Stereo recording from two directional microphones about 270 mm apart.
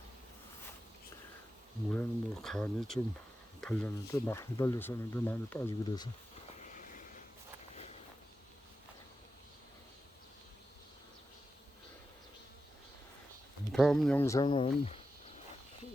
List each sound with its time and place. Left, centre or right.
1.9 s speech: centre
6.6 s a sound: left
13.7 s speech: centre; by 15.0 s left